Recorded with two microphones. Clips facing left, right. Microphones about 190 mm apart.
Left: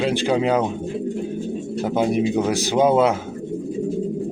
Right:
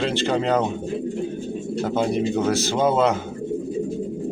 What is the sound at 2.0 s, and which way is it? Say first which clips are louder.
Speech: left 3 dB; 15° left (ahead or behind).